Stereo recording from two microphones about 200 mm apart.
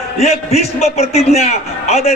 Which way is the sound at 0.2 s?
30° left (ahead or behind).